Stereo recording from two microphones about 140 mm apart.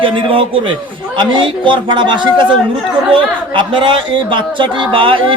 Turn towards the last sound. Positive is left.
turn(degrees=-40)  # may be behind; listen again after turning